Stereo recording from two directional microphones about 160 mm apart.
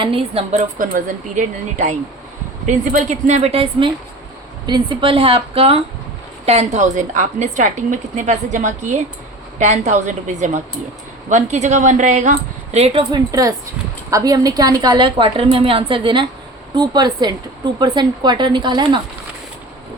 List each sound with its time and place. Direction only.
0.0 s a woman's voice: 35° right (ahead or behind)
0.8 s a woman's voice: 55° right (ahead or behind); by 19.0 s 30° right (ahead or behind)